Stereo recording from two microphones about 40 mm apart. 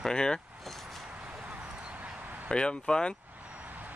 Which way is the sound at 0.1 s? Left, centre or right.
Centre.